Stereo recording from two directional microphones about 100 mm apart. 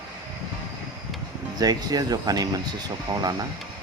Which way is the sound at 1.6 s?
40° right (ahead or behind).